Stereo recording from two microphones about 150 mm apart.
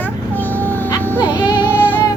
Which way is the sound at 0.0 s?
10° left (ahead or behind).